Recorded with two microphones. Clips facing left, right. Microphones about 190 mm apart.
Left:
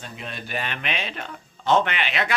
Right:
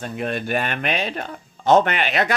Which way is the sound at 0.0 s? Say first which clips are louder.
Right 11 dB; 55° right (ahead or behind).